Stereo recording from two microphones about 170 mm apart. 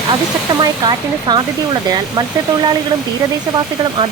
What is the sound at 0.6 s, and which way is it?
Speech, 25° right (ahead or behind).